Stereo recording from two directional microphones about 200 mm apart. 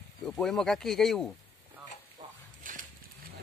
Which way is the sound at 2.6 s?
40° right (ahead or behind).